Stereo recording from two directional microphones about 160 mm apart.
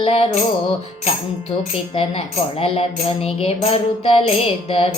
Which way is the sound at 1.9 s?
35° left (ahead or behind).